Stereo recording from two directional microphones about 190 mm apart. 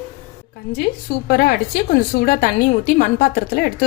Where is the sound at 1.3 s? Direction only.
50° left (ahead or behind).